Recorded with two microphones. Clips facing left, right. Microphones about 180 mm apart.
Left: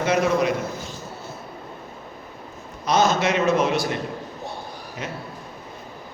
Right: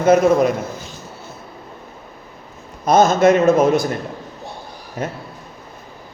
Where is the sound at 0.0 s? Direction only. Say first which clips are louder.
Right 7 dB; 50° right (ahead or behind).